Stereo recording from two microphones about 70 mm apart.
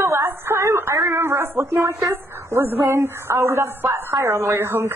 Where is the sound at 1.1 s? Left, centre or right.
Right.